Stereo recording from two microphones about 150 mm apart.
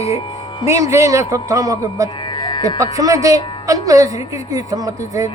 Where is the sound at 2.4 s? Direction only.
30° left (ahead or behind).